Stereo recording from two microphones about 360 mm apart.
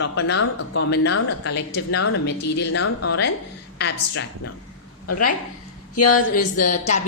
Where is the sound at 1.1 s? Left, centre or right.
Left.